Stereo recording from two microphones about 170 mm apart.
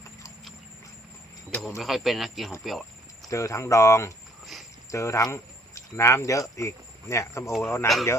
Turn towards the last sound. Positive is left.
turn(degrees=15)  # may be behind; listen again after turning